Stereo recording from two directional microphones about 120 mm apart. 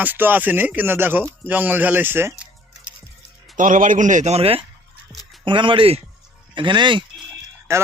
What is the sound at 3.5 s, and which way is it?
A man's voice, 90° right.